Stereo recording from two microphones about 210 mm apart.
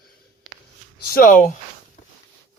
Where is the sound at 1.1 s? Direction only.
40° left (ahead or behind).